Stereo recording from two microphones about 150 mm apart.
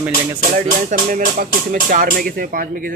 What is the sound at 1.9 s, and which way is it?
Speech, 75° right (ahead or behind).